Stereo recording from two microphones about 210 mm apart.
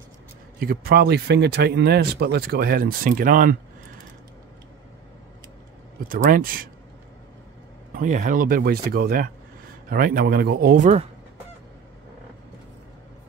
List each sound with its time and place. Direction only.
0.6 s speech: 45° right (ahead or behind)
6.0 s speech: 40° right (ahead or behind)
7.9 s speech: 40° right (ahead or behind)